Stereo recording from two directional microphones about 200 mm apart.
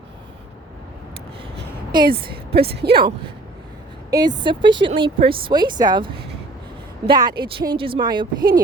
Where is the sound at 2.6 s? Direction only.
50° right (ahead or behind).